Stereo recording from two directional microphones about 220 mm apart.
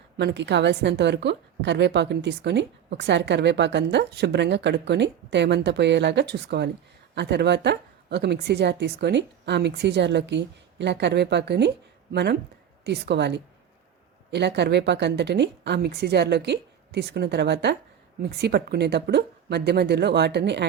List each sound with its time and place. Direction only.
0.2 s a woman's voice: 50° right (ahead or behind)